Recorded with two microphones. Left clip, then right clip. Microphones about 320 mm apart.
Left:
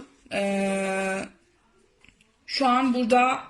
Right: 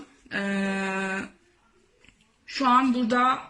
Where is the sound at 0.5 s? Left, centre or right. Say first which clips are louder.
Left 3 dB; centre.